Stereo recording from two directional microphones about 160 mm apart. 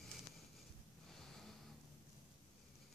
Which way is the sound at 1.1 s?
5° left (ahead or behind).